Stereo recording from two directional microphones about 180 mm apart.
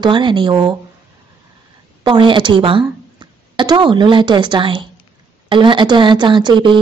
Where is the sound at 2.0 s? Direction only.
25° right (ahead or behind).